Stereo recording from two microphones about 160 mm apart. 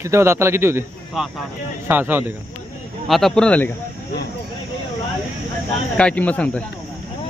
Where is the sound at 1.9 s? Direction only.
10° right (ahead or behind).